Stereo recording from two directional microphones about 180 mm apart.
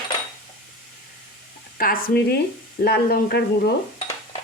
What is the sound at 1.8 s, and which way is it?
Speech, 50° left (ahead or behind).